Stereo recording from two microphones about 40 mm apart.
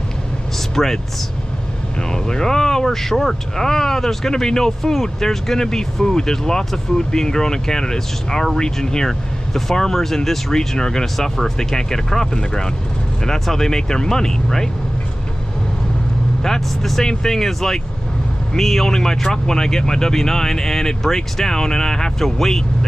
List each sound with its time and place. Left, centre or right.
0.8 s speech: centre
2.2 s speech: centre
16.4 s speech: centre